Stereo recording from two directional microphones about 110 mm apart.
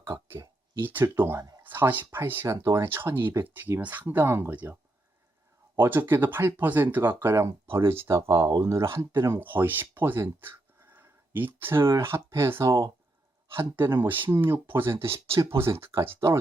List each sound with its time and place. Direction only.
0.1 s a sound: 30° right (ahead or behind)
0.8 s speech: 20° right (ahead or behind)
2.6 s speech: 30° right (ahead or behind)
2.8 s speech: 20° right (ahead or behind)
8.0 s speech: 35° right (ahead or behind)